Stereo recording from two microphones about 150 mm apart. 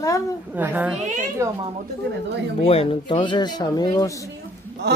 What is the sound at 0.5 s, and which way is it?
Speech, 10° right (ahead or behind).